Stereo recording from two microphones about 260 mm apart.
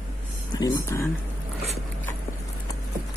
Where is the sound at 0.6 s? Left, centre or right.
Centre.